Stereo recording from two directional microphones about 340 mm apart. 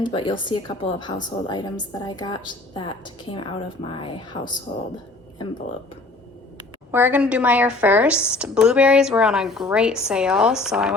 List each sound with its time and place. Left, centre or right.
0.0 s a woman's voice: centre
6.9 s speech: centre